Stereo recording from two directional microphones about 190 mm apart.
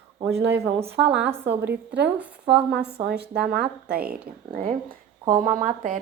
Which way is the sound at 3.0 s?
55° right (ahead or behind).